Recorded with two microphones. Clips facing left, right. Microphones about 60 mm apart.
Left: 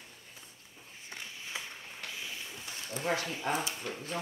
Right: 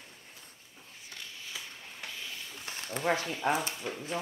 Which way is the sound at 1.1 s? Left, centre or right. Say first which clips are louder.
Left 2 dB; left.